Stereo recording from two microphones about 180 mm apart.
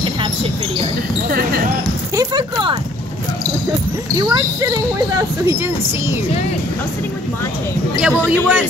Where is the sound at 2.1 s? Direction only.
25° right (ahead or behind).